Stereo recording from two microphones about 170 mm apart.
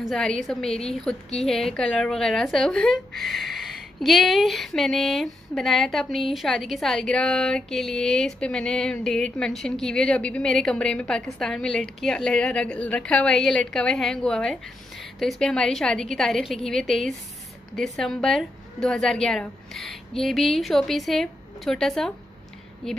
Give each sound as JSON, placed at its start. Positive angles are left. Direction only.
{"t": 0.0, "sound": "a woman's voice", "side_deg": 5}